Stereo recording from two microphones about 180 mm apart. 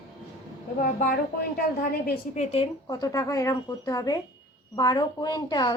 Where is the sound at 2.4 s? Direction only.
35° left (ahead or behind).